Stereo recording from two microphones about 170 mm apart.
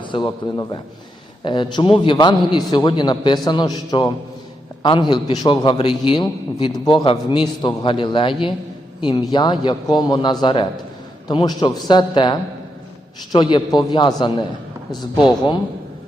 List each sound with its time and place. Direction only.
0.0 s a man's voice: 25° left (ahead or behind)